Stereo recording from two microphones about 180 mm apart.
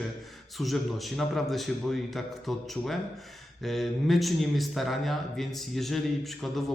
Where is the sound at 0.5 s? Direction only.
Centre (ahead or behind).